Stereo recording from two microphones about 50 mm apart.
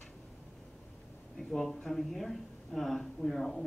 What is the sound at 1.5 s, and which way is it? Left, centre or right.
Speech, centre.